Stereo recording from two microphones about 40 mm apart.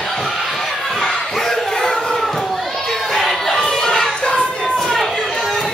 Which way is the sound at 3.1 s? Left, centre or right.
Centre.